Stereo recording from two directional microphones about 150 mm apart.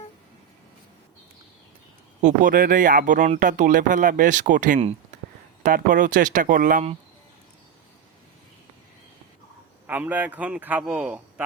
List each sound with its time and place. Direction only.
2.2 s speech: 60° right (ahead or behind)
9.8 s a man's voice: 10° right (ahead or behind)